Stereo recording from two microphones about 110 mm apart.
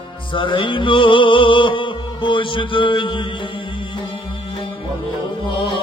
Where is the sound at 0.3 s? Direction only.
50° left (ahead or behind).